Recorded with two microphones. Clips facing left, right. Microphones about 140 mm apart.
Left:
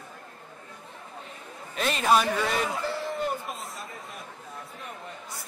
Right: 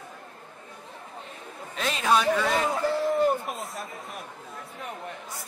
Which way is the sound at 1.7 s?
Centre (ahead or behind).